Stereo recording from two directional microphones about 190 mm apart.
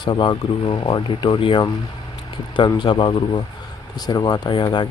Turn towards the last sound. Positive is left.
turn(degrees=25)  # may be behind; listen again after turning